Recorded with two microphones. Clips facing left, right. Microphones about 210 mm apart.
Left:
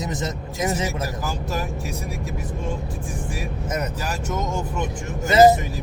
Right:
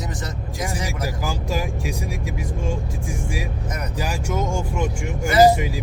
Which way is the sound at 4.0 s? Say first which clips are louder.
Right 2 dB; 10° right (ahead or behind).